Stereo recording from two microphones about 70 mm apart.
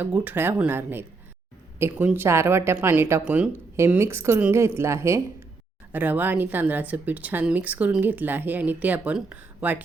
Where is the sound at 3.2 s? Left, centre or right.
Centre.